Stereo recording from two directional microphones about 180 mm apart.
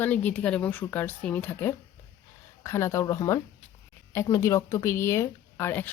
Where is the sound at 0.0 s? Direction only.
10° left (ahead or behind).